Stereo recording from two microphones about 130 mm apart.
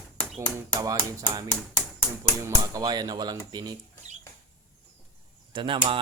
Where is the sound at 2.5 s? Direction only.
30° right (ahead or behind).